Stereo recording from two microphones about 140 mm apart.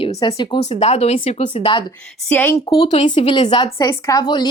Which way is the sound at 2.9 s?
40° left (ahead or behind).